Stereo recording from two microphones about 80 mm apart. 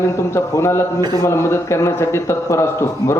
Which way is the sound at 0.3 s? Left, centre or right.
Left.